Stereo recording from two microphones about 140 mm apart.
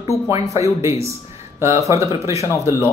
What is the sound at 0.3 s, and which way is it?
A woman's voice, 20° right (ahead or behind).